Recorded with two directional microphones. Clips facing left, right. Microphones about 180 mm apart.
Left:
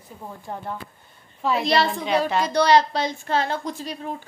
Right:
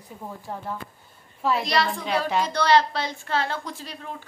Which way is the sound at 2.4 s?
15° left (ahead or behind).